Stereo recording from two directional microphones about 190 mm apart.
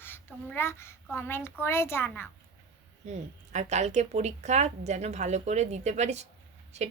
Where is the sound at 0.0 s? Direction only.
10° left (ahead or behind).